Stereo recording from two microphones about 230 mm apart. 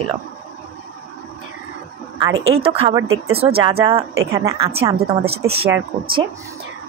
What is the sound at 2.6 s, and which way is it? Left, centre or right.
A woman's voice, right.